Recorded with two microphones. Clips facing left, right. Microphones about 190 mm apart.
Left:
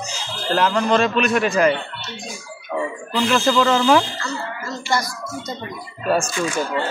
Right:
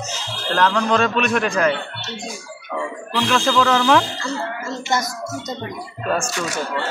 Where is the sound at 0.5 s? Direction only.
5° left (ahead or behind).